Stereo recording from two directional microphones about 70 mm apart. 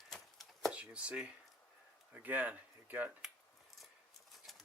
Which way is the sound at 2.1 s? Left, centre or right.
Right.